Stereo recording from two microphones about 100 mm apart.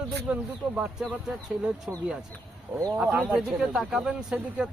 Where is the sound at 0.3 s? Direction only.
15° right (ahead or behind).